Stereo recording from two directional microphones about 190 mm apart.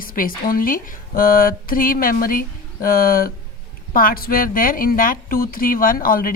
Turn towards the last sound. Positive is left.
turn(degrees=50)  # may be behind; listen again after turning